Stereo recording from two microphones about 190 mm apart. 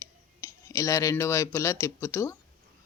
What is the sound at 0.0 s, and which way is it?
Speech, 15° left (ahead or behind).